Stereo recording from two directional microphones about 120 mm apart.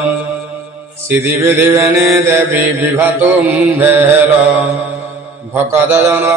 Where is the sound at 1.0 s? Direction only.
20° right (ahead or behind).